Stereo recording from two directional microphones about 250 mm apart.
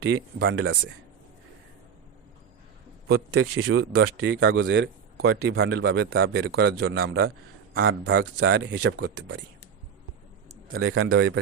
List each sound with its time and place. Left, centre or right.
0.0 s speech: right
3.1 s speech: right
5.3 s speech: right
10.7 s speech: right